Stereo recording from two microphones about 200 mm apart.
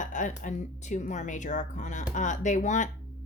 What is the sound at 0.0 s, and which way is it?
Speech, 40° left (ahead or behind).